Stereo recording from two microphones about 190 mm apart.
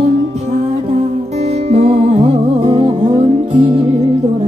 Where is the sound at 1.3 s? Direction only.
35° right (ahead or behind).